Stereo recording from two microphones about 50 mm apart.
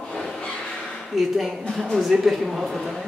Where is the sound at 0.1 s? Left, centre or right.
Centre.